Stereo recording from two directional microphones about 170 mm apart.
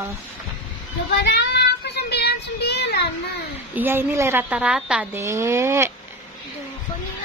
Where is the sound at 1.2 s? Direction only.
80° left.